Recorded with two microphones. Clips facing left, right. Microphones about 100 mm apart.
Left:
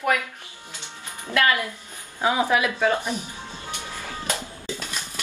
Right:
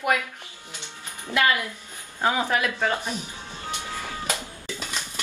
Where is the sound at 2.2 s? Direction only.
10° left (ahead or behind).